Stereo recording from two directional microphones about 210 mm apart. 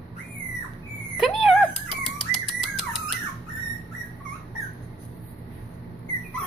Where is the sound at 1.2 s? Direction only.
Centre (ahead or behind).